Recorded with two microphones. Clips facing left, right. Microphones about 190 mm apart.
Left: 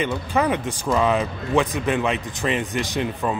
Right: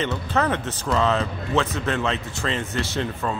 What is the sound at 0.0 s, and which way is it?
Speech, 10° left (ahead or behind).